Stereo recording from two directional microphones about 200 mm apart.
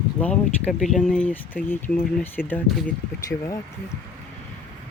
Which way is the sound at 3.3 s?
50° left (ahead or behind).